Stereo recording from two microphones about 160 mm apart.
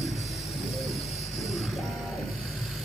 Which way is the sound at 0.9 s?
40° left (ahead or behind).